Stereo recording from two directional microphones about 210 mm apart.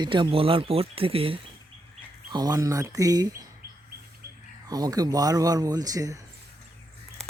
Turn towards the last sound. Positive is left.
turn(degrees=-15)  # may be behind; listen again after turning